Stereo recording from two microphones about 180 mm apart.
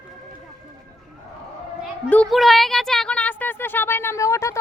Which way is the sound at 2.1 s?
5° left (ahead or behind).